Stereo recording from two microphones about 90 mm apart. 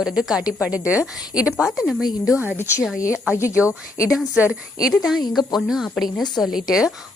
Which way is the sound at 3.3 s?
30° left (ahead or behind).